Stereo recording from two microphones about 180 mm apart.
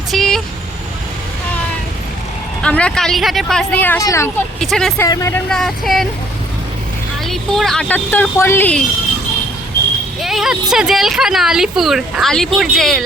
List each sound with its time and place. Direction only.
0.1 s vehicle: centre (ahead or behind)
2.6 s speech: 5° left (ahead or behind)
4.6 s speech: centre (ahead or behind)
4.9 s speech: 20° left (ahead or behind)
5.5 s speech: centre (ahead or behind)
7.3 s speech: centre (ahead or behind)
10.2 s speech: centre (ahead or behind)